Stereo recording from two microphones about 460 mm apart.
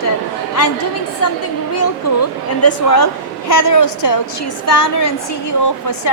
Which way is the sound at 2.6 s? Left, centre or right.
Left.